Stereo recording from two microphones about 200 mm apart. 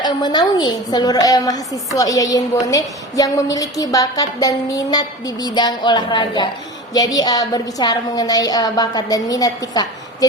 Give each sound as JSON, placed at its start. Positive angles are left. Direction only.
{"t": 0.0, "sound": "a woman's voice", "side_deg": 20}